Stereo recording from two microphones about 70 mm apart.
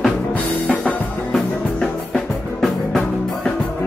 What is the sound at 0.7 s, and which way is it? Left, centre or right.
Music, centre.